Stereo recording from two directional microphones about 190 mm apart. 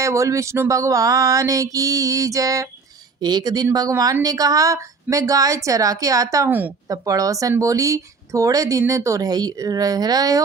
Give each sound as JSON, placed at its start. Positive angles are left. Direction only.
{"t": 0.0, "sound": "speech", "side_deg": -15}